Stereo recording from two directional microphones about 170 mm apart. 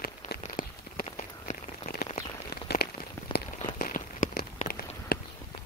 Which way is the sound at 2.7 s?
65° left (ahead or behind).